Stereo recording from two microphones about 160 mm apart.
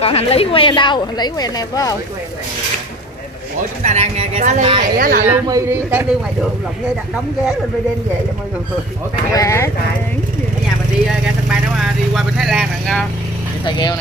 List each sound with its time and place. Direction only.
0.0 s a woman's voice: 40° left (ahead or behind)
3.8 s speech: 45° right (ahead or behind)
4.9 s speech: 65° right (ahead or behind)
5.2 s a man's voice: 15° right (ahead or behind)
9.3 s speech: 20° left (ahead or behind)
11.2 s vehicle: centre (ahead or behind)
13.7 s speech: 25° left (ahead or behind)